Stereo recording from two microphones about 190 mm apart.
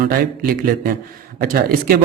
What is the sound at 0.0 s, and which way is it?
Speech, 50° right (ahead or behind).